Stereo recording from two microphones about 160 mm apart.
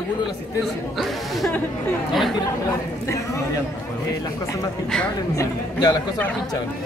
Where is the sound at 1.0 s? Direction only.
Centre (ahead or behind).